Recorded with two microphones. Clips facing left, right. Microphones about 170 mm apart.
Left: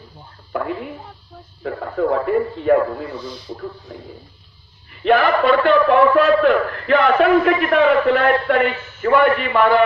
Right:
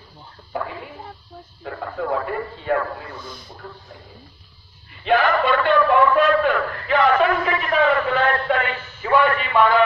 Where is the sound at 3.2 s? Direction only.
50° right (ahead or behind).